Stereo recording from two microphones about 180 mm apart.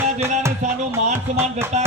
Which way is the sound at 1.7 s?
40° right (ahead or behind).